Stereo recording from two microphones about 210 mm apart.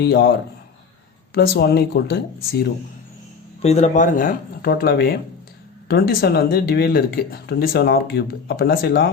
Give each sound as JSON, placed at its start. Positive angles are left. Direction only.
{"t": 0.0, "sound": "speech", "side_deg": 50}
{"t": 3.6, "sound": "speech", "side_deg": 30}